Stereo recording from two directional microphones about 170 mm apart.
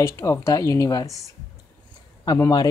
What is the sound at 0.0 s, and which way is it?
Speech, 15° left (ahead or behind).